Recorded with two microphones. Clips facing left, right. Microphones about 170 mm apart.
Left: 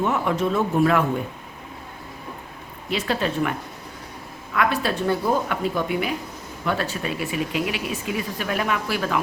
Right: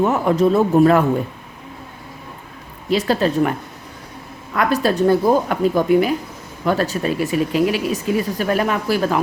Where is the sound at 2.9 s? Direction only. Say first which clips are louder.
Right 7 dB; 40° right (ahead or behind).